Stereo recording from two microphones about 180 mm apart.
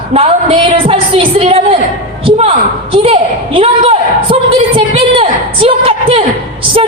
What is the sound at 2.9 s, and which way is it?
A woman's voice, 30° right (ahead or behind).